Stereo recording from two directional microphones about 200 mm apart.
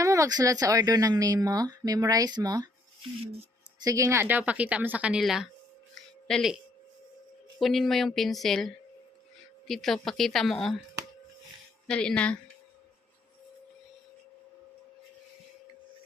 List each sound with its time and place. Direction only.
0.0 s speech: 15° right (ahead or behind); by 6.6 s centre (ahead or behind)
7.6 s speech: centre (ahead or behind)
11.9 s speech: 5° left (ahead or behind)